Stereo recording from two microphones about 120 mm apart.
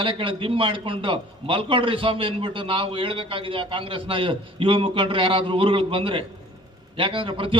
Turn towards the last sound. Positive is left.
turn(degrees=-45)  # may be behind; listen again after turning